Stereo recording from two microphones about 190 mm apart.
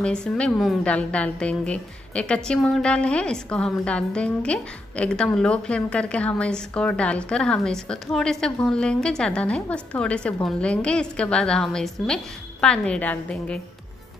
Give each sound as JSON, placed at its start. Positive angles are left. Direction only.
{"t": 0.0, "sound": "a woman's voice", "side_deg": 5}